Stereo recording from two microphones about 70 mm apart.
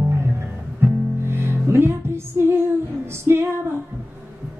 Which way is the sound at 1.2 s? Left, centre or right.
Right.